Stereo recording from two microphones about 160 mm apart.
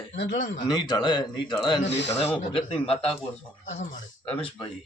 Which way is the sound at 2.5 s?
35° left (ahead or behind).